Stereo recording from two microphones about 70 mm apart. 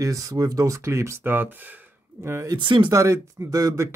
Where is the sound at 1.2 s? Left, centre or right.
Right.